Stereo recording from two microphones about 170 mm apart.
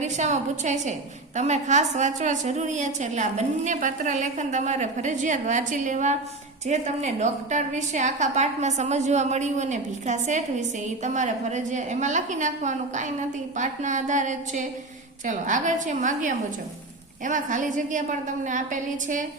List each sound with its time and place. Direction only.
0.0 s a woman's voice: 45° right (ahead or behind)